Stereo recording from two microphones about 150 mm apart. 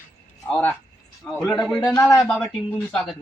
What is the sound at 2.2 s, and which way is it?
Speech, 5° left (ahead or behind).